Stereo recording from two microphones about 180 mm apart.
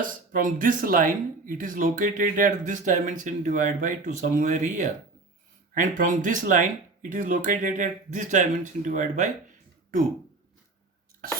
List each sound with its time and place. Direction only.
0.0 s speech: 50° right (ahead or behind)